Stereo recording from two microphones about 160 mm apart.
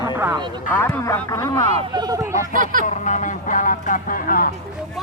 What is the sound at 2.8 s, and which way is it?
Speech, 50° left (ahead or behind).